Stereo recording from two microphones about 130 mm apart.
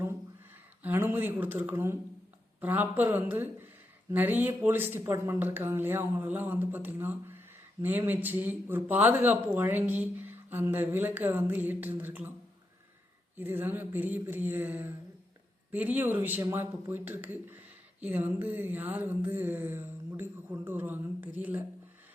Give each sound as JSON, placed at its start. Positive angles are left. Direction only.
{"t": 0.8, "sound": "speech", "side_deg": -15}
{"t": 13.3, "sound": "speech", "side_deg": -15}